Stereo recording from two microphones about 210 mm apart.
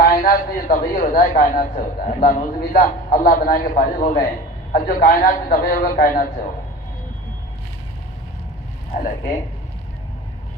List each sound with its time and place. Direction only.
0.0 s a man's voice: 40° left (ahead or behind)
8.9 s a man's voice: 35° left (ahead or behind)